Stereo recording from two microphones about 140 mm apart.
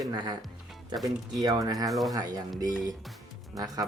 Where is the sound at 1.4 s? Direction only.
25° right (ahead or behind).